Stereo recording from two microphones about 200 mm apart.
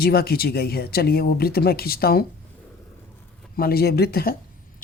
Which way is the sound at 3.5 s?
50° left (ahead or behind).